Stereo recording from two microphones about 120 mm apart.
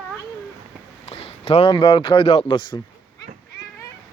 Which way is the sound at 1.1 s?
55° left (ahead or behind).